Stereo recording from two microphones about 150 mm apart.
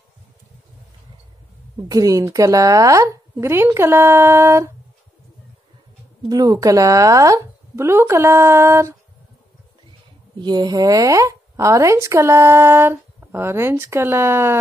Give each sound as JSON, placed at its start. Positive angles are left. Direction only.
{"t": 1.8, "sound": "a woman's voice", "side_deg": -25}
{"t": 6.2, "sound": "a woman's voice", "side_deg": -25}
{"t": 10.4, "sound": "a woman's voice", "side_deg": -30}